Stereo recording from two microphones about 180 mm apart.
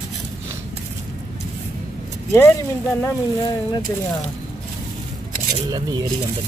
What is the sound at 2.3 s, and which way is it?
Speech, 15° left (ahead or behind).